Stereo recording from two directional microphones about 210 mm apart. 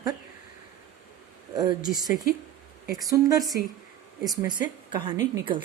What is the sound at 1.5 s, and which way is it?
A woman's voice, 20° right (ahead or behind).